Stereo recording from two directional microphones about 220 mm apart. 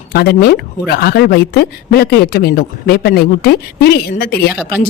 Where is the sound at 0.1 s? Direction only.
45° left (ahead or behind).